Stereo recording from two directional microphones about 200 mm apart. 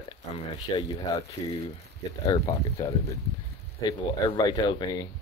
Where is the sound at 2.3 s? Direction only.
20° left (ahead or behind).